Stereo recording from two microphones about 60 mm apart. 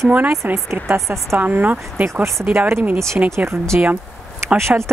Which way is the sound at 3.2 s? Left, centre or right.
Right.